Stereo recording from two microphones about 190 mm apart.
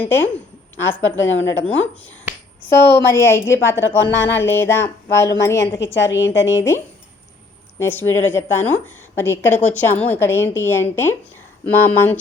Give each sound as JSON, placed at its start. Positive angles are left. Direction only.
{"t": 0.0, "sound": "a woman's voice", "side_deg": 10}
{"t": 1.0, "sound": "a woman's voice", "side_deg": 90}
{"t": 1.4, "sound": "a woman's voice", "side_deg": 10}
{"t": 1.7, "sound": "speech", "side_deg": 90}
{"t": 2.6, "sound": "a woman's voice", "side_deg": 10}